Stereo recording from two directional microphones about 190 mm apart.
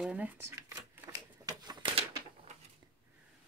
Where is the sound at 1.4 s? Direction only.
20° right (ahead or behind).